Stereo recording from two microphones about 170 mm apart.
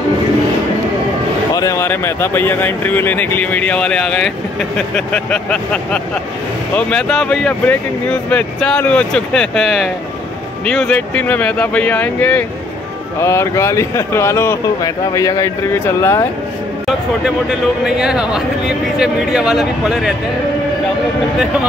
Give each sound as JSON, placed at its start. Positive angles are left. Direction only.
{"t": 1.5, "sound": "speech", "side_deg": 20}
{"t": 17.8, "sound": "speech", "side_deg": -5}